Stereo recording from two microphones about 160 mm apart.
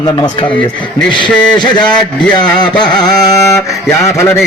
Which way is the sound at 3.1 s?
25° left (ahead or behind).